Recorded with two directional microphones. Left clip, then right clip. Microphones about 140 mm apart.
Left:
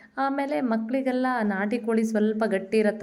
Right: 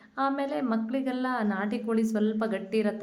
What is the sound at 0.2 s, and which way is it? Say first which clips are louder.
A woman's voice: left 3 dB; 20° left (ahead or behind).